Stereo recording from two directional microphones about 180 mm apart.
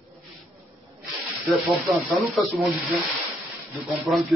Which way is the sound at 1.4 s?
Centre (ahead or behind).